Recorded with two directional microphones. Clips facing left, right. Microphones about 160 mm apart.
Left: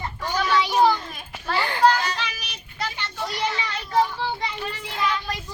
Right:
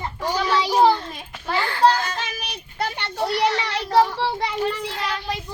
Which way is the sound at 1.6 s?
15° left (ahead or behind).